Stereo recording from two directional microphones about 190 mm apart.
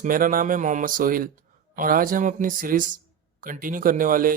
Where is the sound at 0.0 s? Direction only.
45° right (ahead or behind).